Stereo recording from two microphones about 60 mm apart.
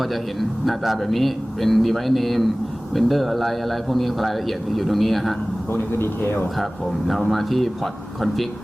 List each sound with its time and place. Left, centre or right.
0.0 s speech: centre
5.9 s speech: left
7.1 s speech: centre